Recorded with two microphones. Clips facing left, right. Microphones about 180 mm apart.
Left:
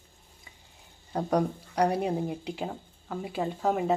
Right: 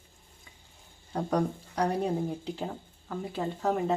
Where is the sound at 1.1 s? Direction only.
10° left (ahead or behind).